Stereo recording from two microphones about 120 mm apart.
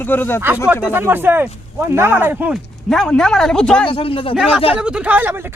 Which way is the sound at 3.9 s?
50° left (ahead or behind).